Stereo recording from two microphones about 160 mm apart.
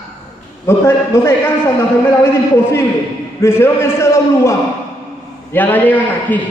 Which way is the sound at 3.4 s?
15° left (ahead or behind).